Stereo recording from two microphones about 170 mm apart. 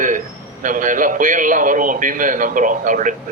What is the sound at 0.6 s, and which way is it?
A man's voice, 50° right (ahead or behind).